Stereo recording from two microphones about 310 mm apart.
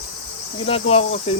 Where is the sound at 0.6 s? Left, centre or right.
Centre.